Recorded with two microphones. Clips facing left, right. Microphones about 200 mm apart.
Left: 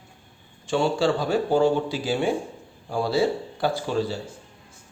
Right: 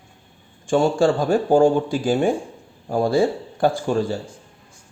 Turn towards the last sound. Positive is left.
turn(degrees=-50)  # may be behind; listen again after turning